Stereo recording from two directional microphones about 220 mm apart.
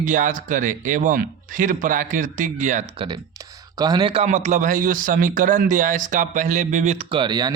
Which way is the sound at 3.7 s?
20° right (ahead or behind).